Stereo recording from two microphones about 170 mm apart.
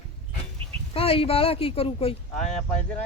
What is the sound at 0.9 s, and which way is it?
Speech, 35° left (ahead or behind).